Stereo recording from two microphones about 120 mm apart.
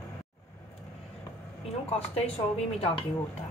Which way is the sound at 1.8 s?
55° left (ahead or behind).